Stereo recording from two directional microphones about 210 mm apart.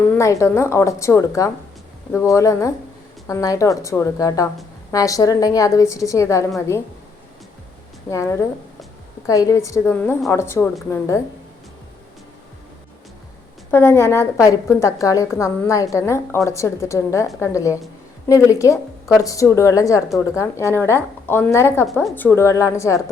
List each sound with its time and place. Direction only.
0.1 s a woman's voice: 15° left (ahead or behind)
8.1 s a woman's voice: 15° left (ahead or behind)
13.7 s a woman's voice: 10° left (ahead or behind)